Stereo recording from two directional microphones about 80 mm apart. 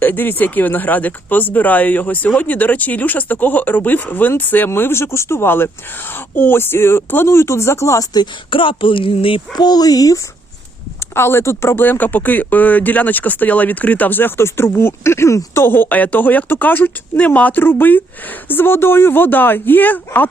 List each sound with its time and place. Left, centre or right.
0.0 s speech: left
8.1 s speech: left
9.6 s speech: left
11.1 s speech: left